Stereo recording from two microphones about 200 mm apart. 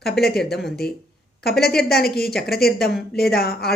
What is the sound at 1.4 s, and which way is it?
A woman's voice, 50° left (ahead or behind).